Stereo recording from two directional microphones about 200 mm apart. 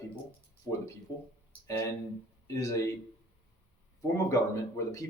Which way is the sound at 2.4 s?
15° left (ahead or behind).